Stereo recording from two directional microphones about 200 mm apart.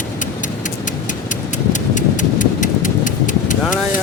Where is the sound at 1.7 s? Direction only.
40° left (ahead or behind).